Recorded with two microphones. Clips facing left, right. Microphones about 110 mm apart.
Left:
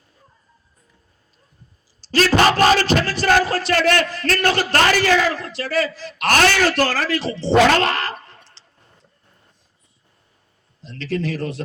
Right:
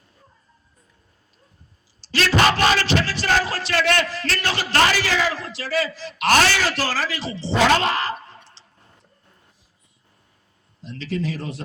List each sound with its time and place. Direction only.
2.0 s speech: 45° left (ahead or behind); by 8.6 s 60° left (ahead or behind)
10.8 s speech: 65° left (ahead or behind)